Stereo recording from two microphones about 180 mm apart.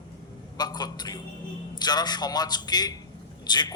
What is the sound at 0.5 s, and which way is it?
A man's voice, 20° left (ahead or behind).